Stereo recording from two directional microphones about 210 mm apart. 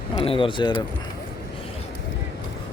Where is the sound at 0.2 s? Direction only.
25° left (ahead or behind).